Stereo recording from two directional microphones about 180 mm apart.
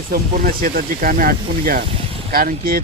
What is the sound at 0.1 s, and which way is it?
Speech, 50° right (ahead or behind).